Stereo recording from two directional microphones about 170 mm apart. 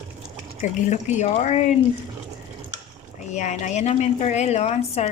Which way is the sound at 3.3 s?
45° left (ahead or behind).